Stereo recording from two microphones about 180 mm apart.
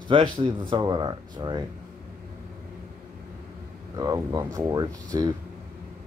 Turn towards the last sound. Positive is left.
turn(degrees=-20)  # may be behind; listen again after turning